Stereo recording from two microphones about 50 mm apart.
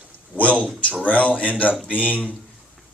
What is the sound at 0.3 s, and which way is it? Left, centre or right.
A man's voice, left.